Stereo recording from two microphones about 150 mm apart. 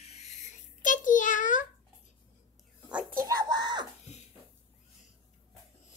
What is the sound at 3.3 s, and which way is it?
Music, 30° right (ahead or behind).